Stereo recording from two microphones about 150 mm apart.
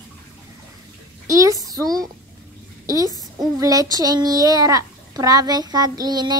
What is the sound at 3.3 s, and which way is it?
A woman's voice, 25° right (ahead or behind).